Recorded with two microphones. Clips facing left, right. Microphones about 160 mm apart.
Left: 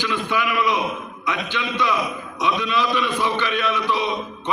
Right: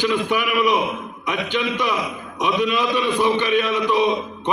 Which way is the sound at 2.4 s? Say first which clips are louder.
Right 2 dB; 15° right (ahead or behind).